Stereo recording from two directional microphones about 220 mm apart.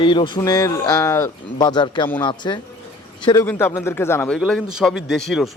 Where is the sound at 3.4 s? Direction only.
10° left (ahead or behind).